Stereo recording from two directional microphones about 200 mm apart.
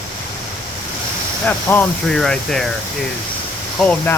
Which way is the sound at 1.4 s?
10° left (ahead or behind).